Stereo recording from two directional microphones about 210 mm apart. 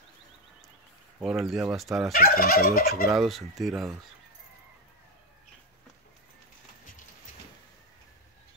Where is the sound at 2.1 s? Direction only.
45° left (ahead or behind).